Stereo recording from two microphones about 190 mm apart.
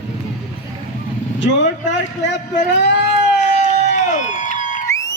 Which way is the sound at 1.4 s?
70° left (ahead or behind).